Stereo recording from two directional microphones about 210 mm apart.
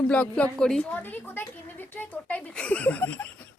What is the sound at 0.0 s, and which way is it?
A woman's voice, 5° left (ahead or behind).